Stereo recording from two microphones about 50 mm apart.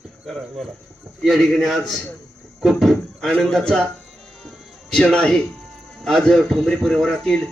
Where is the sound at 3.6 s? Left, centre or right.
Centre.